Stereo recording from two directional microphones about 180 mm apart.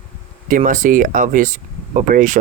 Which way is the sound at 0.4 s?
45° right (ahead or behind).